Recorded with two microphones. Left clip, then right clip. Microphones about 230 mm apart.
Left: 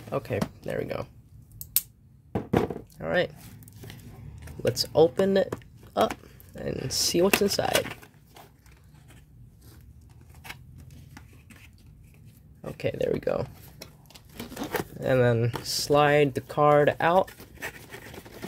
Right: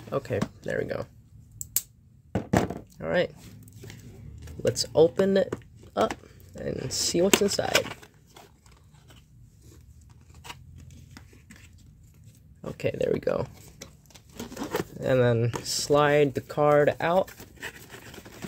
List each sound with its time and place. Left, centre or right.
0.1 s speech: centre
2.5 s a sound: right
3.0 s speech: centre
4.5 s speech: centre
12.6 s speech: centre
14.8 s speech: centre